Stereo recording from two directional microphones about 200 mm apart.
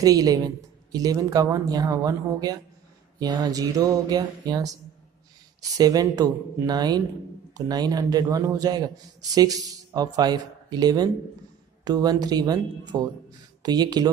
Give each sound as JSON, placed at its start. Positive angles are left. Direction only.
{"t": 0.0, "sound": "a man's voice", "side_deg": -20}